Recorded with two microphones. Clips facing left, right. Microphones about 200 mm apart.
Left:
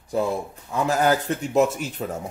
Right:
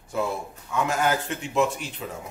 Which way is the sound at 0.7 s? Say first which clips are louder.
Left 4 dB; 35° left (ahead or behind).